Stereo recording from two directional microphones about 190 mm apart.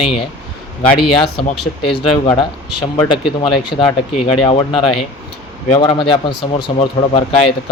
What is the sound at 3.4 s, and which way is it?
Speech, 25° left (ahead or behind).